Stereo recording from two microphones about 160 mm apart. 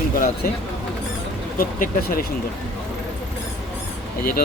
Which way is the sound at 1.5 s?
65° left (ahead or behind).